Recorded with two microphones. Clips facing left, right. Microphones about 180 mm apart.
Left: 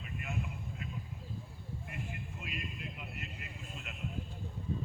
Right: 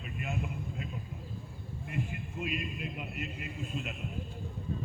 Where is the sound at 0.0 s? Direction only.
25° right (ahead or behind).